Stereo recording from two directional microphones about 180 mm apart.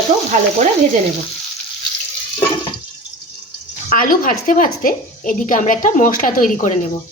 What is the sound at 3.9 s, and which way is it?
A woman's voice, 50° left (ahead or behind).